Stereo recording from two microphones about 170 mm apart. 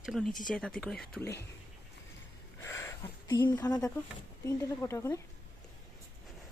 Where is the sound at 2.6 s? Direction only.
15° left (ahead or behind).